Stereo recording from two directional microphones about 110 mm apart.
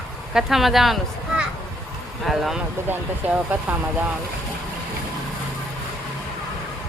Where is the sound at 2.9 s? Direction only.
15° right (ahead or behind).